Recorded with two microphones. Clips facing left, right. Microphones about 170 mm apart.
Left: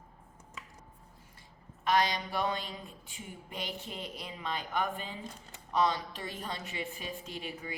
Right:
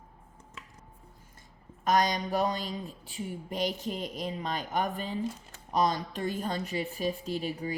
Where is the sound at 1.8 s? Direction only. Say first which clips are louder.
Right 3 dB; 45° right (ahead or behind).